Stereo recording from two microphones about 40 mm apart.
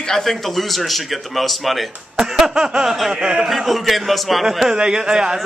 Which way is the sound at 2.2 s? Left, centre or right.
Centre.